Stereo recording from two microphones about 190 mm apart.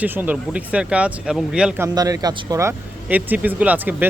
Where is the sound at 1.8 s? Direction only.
20° right (ahead or behind).